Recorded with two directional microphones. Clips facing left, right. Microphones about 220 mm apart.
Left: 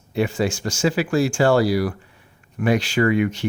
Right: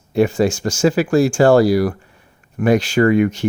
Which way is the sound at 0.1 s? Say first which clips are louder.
Right 6 dB; 45° right (ahead or behind).